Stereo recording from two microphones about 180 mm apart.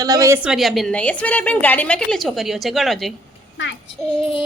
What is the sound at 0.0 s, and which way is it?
Speech, 20° right (ahead or behind).